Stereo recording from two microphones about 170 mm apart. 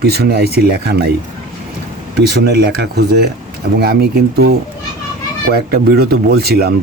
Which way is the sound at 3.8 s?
65° right (ahead or behind).